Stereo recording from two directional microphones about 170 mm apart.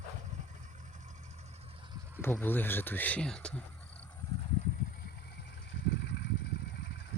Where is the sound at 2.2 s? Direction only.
10° left (ahead or behind).